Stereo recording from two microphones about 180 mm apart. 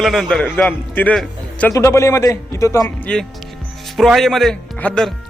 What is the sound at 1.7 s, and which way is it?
A man's voice, 15° left (ahead or behind).